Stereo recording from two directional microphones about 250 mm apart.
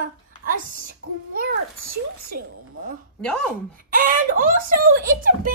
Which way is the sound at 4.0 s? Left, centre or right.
Right.